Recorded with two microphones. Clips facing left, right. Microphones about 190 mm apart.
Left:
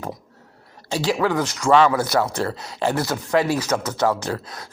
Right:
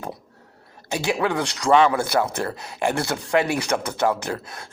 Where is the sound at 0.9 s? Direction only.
20° right (ahead or behind).